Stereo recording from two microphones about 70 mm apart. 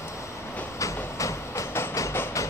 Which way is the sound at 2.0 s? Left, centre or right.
Left.